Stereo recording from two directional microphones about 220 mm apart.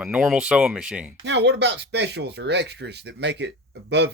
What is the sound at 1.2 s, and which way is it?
Speech, 55° right (ahead or behind).